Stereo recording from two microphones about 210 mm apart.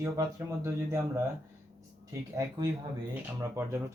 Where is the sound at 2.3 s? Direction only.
15° right (ahead or behind).